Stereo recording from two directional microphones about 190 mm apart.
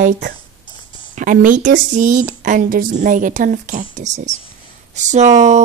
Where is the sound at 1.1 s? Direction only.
45° right (ahead or behind).